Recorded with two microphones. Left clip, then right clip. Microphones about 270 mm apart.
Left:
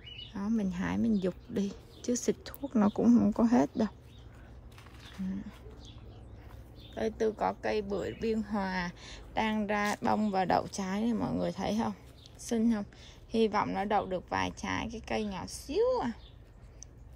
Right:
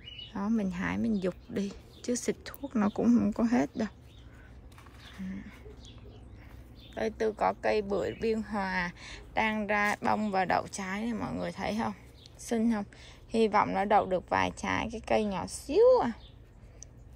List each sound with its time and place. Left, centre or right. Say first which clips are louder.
0.3 s speech: right 2 dB; centre
6.9 s speech: even; centre